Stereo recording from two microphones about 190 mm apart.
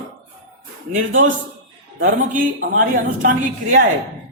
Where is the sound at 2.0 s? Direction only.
45° right (ahead or behind).